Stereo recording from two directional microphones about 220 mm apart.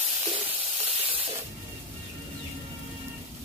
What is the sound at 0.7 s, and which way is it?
Spray, 30° right (ahead or behind).